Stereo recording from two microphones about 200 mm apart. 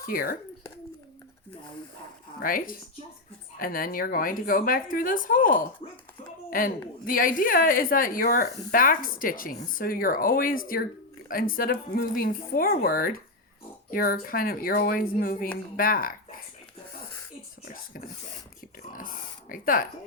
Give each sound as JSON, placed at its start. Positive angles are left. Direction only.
{"t": 0.0, "sound": "a woman's voice", "side_deg": 50}
{"t": 2.4, "sound": "a woman's voice", "side_deg": 45}
{"t": 19.5, "sound": "a woman's voice", "side_deg": 45}